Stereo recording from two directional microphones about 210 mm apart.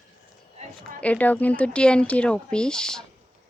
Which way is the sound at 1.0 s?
5° left (ahead or behind).